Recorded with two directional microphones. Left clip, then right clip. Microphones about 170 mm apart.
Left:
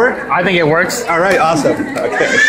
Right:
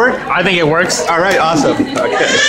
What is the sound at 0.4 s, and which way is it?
Speech, 5° right (ahead or behind).